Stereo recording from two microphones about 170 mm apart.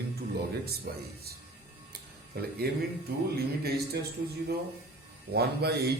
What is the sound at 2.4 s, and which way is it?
Speech, 65° right (ahead or behind).